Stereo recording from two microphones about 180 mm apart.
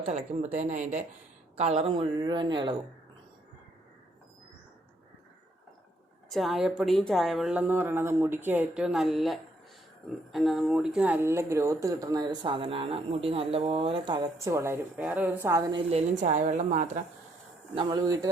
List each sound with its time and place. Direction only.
0.1 s a woman's voice: 40° right (ahead or behind)
6.2 s speech: centre (ahead or behind)
15.7 s a woman's voice: 35° right (ahead or behind)
17.7 s speech: 25° right (ahead or behind)